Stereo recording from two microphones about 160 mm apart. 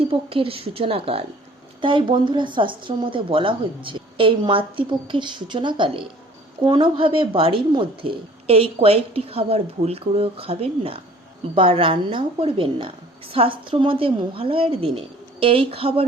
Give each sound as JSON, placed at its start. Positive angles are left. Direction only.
{"t": 0.0, "sound": "a woman's voice", "side_deg": -35}